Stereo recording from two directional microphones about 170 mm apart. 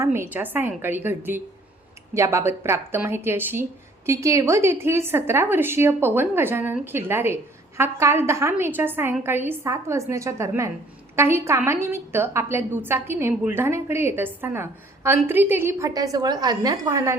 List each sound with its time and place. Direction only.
0.0 s a woman's voice: 15° right (ahead or behind)